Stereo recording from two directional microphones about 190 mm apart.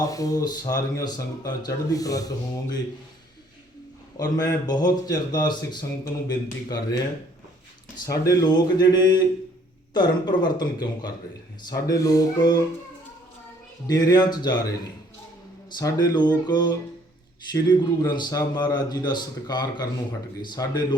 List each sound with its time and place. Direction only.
0.0 s speech: 20° left (ahead or behind)
4.2 s speech: 20° left (ahead or behind)
8.2 s speech: 20° left (ahead or behind)
13.8 s speech: 20° left (ahead or behind)
15.8 s speech: 20° left (ahead or behind)